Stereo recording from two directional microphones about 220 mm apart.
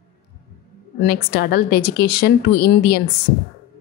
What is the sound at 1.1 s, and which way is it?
Speech, 50° left (ahead or behind).